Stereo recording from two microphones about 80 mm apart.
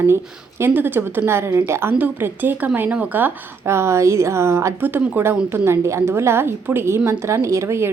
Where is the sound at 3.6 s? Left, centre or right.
Right.